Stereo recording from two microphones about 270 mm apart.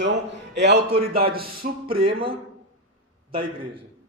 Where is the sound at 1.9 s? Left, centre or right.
Centre.